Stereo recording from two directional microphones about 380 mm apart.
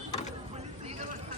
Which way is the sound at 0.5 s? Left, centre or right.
Centre.